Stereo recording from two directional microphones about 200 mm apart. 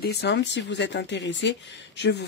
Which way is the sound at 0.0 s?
55° left (ahead or behind).